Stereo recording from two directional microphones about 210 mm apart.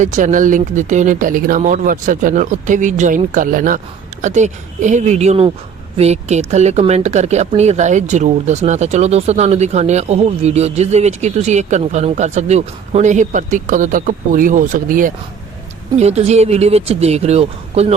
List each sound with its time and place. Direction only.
0.0 s speech: 35° right (ahead or behind)